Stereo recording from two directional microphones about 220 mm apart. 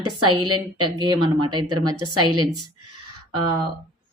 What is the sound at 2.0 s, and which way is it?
Speech, 90° right.